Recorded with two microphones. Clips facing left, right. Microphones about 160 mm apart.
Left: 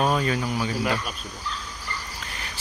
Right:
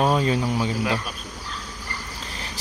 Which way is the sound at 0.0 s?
25° right (ahead or behind).